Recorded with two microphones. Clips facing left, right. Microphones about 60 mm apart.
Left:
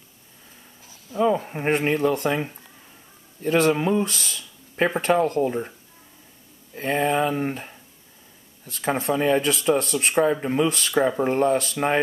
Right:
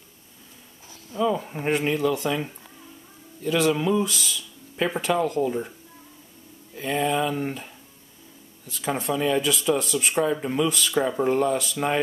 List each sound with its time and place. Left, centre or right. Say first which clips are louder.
1.1 s speech: left 3 dB; left
1.7 s speech: left 2 dB; left
3.4 s speech: left 3 dB; left
3.7 s speech: left 1 dB; left
4.0 s speech: even; left
6.7 s speech: left 2 dB; left
8.6 s speech: left 3 dB; left
9.1 s speech: left 2 dB; left
10.3 s speech: left 2 dB; left
11.2 s speech: left 2 dB; left